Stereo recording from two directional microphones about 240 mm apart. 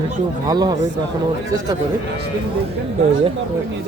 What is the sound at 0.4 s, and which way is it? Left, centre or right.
Speech, centre.